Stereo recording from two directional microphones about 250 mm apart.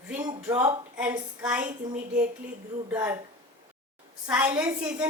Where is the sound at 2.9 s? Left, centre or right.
Centre.